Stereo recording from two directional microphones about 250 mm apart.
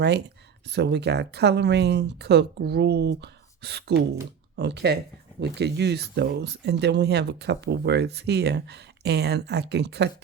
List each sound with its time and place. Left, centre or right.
0.7 s speech: right